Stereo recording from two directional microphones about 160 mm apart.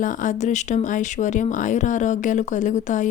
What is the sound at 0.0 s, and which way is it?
Speech, 55° left (ahead or behind).